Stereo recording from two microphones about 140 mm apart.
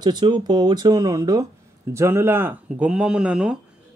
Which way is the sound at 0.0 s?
30° right (ahead or behind).